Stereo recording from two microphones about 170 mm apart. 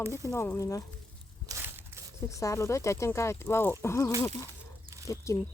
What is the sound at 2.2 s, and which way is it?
Speech, 20° left (ahead or behind).